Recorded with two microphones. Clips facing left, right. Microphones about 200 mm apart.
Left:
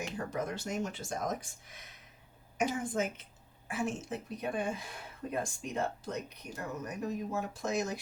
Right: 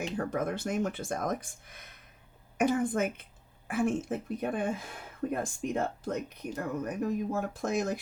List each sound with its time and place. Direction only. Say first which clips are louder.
0.3 s speech: right 5 dB; 55° right (ahead or behind)